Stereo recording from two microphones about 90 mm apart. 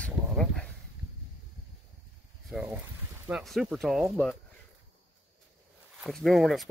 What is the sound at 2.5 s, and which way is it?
Speech, 5° right (ahead or behind).